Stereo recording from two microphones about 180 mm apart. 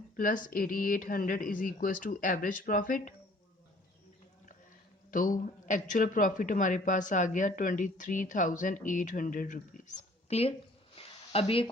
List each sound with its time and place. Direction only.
0.2 s speech: 50° left (ahead or behind)
5.1 s speech: 50° left (ahead or behind)
10.9 s a sound: 35° left (ahead or behind)